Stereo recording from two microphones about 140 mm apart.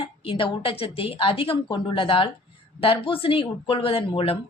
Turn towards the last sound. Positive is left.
turn(degrees=40)  # may be behind; listen again after turning